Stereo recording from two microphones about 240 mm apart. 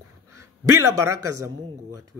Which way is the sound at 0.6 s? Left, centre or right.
Right.